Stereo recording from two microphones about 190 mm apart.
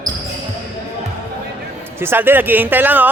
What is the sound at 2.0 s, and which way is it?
Speech, 10° right (ahead or behind).